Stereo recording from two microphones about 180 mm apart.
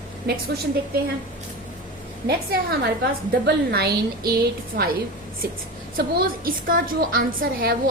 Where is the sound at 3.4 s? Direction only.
60° right (ahead or behind).